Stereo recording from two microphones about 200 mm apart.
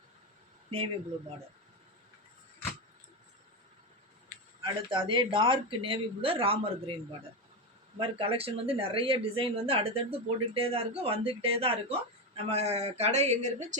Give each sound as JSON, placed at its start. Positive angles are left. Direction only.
{"t": 4.6, "sound": "speech", "side_deg": -25}
{"t": 7.9, "sound": "speech", "side_deg": -25}